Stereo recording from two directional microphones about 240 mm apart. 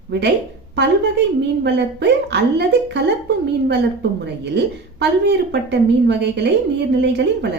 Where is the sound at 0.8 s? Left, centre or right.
Right.